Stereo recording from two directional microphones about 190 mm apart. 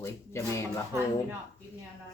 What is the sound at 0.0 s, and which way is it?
Speech, 15° left (ahead or behind).